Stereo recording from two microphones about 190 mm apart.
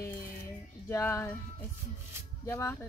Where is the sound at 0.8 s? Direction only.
15° left (ahead or behind).